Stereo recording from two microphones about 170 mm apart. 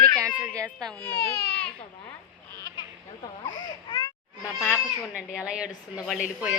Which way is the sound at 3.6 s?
25° left (ahead or behind).